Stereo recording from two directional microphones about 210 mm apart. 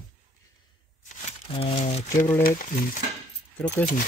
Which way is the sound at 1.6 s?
30° left (ahead or behind).